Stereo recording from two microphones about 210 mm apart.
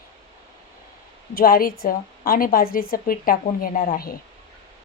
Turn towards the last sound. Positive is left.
turn(degrees=45)  # may be behind; listen again after turning